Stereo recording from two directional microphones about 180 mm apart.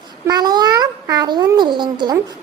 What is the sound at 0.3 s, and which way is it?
A child's voice, 20° right (ahead or behind).